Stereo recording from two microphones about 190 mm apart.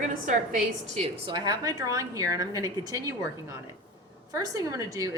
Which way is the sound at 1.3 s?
20° right (ahead or behind).